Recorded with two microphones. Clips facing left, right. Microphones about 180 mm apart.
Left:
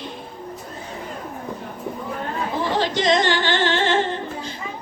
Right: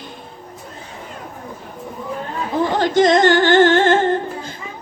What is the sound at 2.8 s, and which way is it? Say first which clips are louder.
Music: right 7 dB; 50° right (ahead or behind).